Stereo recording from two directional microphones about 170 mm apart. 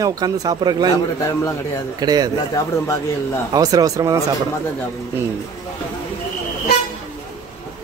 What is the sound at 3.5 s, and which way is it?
Speech, 20° right (ahead or behind).